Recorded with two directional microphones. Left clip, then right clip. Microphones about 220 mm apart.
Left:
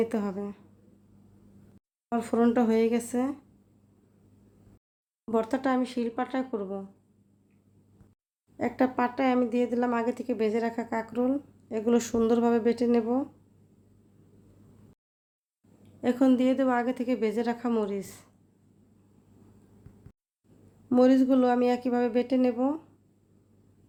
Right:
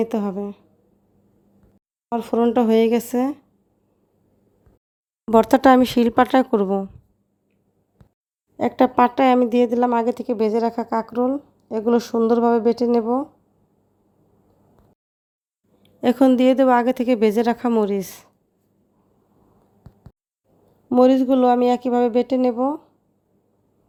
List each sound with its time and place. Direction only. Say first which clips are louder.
0.0 s a woman's voice: right 6 dB; 30° right (ahead or behind)
2.0 s a woman's voice: right 6 dB; 25° right (ahead or behind)
5.3 s speech: right 14 dB; 45° right (ahead or behind)
8.5 s a woman's voice: right 11 dB; 35° right (ahead or behind)
16.0 s a woman's voice: right 8 dB; 40° right (ahead or behind)
20.9 s a woman's voice: right 7 dB; 30° right (ahead or behind)